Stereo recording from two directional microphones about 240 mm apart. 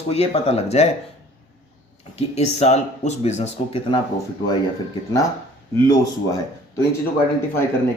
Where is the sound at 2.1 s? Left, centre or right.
Left.